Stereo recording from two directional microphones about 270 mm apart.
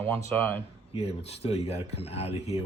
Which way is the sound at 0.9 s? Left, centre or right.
Left.